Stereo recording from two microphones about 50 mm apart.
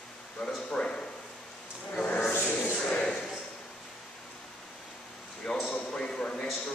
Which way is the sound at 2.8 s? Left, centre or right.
Centre.